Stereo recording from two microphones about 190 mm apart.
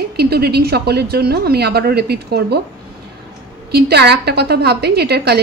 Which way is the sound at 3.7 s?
60° right (ahead or behind).